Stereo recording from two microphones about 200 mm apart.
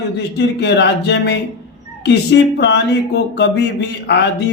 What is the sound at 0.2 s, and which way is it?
Speech, 60° left (ahead or behind).